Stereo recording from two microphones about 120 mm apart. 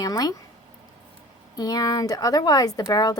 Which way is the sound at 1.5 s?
30° left (ahead or behind).